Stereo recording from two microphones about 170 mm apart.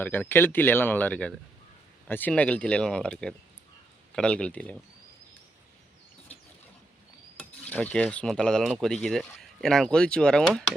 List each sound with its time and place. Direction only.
0.0 s speech: 10° left (ahead or behind)
7.3 s a sound: 10° left (ahead or behind)
8.7 s speech: centre (ahead or behind)